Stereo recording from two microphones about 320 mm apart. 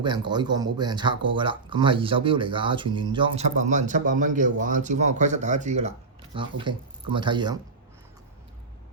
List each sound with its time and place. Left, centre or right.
0.0 s speech: centre